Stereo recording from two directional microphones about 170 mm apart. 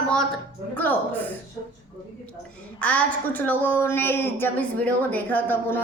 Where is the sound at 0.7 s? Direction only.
10° left (ahead or behind).